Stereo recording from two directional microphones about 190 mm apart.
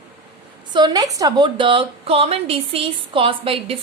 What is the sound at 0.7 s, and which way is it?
A woman's voice, 20° right (ahead or behind).